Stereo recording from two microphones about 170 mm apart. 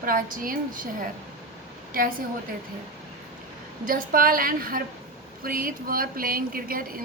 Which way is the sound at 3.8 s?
55° right (ahead or behind).